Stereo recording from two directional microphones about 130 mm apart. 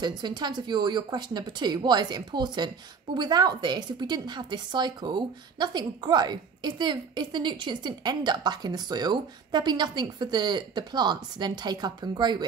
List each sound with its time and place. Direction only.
0.2 s a woman's voice: 35° right (ahead or behind)